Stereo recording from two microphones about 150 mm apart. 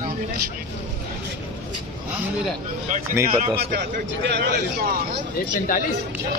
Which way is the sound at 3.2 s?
85° right.